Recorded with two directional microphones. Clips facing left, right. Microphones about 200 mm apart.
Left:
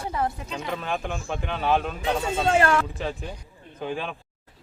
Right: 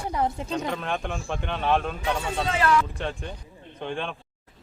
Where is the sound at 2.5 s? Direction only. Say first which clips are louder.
Left 2 dB; 50° left (ahead or behind).